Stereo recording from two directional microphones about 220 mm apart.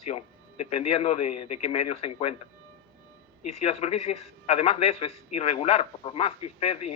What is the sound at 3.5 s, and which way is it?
A man's voice, 30° left (ahead or behind).